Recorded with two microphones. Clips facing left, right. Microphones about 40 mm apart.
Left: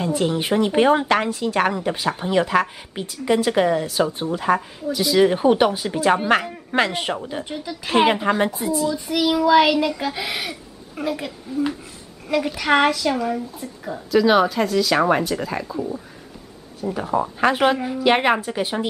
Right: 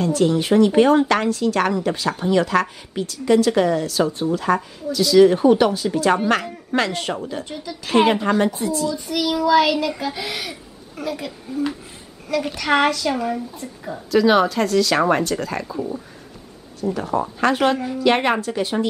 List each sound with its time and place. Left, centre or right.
0.0 s speech: centre
15.6 s speech: centre
16.8 s speech: centre